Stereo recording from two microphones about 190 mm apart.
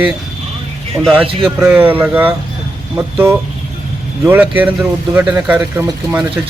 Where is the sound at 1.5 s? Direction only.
10° right (ahead or behind).